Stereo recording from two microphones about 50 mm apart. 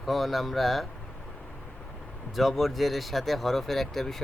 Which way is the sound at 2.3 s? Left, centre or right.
Centre.